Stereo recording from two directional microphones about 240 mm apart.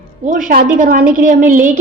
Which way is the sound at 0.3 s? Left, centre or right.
Right.